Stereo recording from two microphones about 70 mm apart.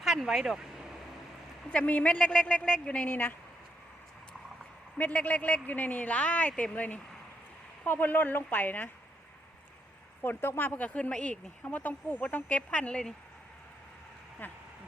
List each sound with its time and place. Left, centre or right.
0.0 s speech: centre
1.7 s a woman's voice: left
4.9 s speech: left
10.2 s speech: left; by 13.1 s centre
14.4 s speech: left